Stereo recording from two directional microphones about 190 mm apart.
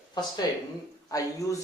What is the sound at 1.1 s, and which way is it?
Speech, 15° left (ahead or behind).